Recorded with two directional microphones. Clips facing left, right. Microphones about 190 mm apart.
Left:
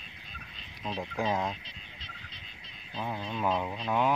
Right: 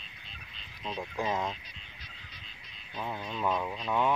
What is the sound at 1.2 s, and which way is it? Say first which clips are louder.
Speech: left 2 dB; centre (ahead or behind).